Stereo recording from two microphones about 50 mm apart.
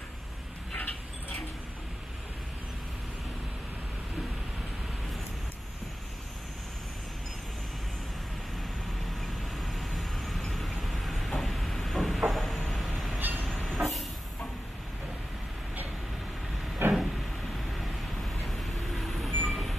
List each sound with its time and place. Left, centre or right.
0.7 s a sound: left
9.2 s vehicle: centre
13.2 s train: right
13.7 s vehicle: centre
16.8 s vehicle: right
18.5 s vehicle: centre